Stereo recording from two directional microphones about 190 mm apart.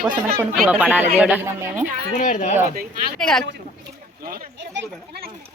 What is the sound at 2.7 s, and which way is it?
Speech, 45° right (ahead or behind).